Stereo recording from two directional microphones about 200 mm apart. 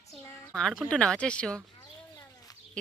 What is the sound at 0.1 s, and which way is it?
A woman's voice, centre (ahead or behind).